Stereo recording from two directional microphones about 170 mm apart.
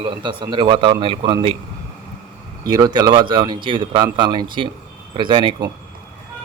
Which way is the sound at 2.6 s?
20° right (ahead or behind).